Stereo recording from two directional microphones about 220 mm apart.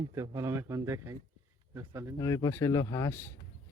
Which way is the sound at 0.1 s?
15° right (ahead or behind).